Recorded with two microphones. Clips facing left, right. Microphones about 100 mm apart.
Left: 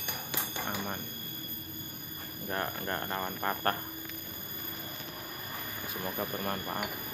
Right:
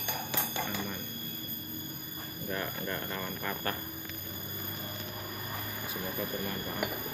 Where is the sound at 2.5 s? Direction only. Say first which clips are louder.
Left 2 dB; 40° left (ahead or behind).